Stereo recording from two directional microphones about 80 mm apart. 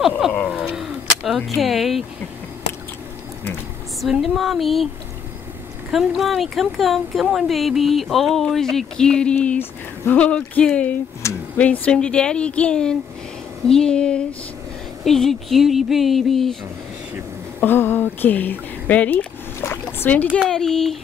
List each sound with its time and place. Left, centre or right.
0.5 s a sound: centre
4.0 s speech: centre
5.9 s speech: centre
17.6 s speech: left
19.6 s a sound: left
20.4 s speech: centre